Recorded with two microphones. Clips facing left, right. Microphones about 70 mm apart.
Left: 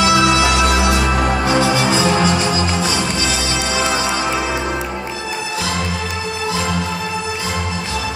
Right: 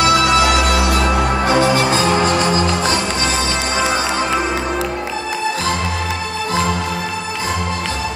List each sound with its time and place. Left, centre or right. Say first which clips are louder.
0.1 s music: right 1 dB; right